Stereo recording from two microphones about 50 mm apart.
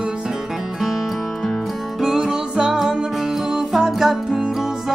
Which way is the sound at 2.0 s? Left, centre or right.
Centre.